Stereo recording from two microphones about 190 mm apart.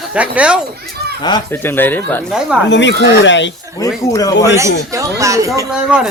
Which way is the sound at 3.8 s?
20° left (ahead or behind).